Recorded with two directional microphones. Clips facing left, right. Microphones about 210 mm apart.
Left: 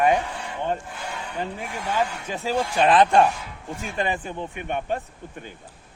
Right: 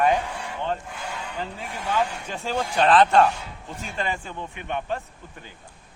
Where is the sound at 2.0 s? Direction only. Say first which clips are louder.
Left 1 dB; 5° left (ahead or behind).